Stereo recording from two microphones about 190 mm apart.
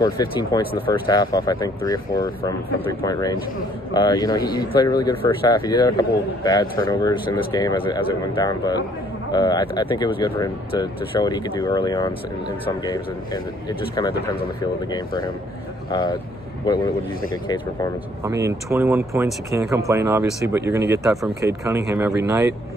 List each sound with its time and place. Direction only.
0.0 s speech: 20° left (ahead or behind)
18.2 s speech: 15° right (ahead or behind)